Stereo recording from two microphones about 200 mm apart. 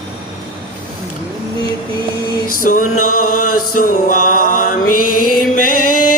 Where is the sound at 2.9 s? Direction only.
90° left.